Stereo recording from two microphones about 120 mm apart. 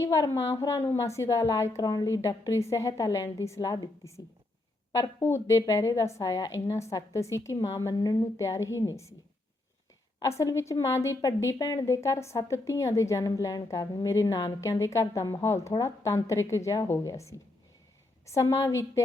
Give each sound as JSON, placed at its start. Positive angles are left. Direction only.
{"t": 0.0, "sound": "a woman's voice", "side_deg": 30}
{"t": 10.2, "sound": "a woman's voice", "side_deg": 25}